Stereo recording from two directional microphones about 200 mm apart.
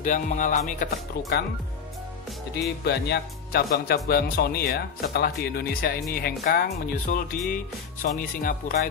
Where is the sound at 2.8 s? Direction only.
55° left (ahead or behind).